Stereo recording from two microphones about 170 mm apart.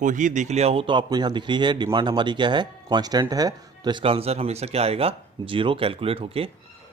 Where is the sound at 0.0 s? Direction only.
50° right (ahead or behind).